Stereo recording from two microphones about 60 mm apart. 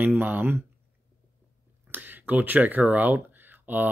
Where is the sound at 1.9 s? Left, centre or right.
Right.